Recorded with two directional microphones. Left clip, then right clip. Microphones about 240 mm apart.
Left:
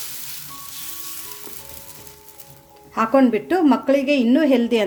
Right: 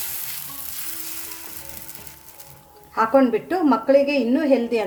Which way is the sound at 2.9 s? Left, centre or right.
Left.